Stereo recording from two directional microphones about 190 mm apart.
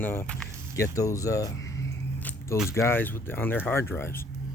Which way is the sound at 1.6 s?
10° left (ahead or behind).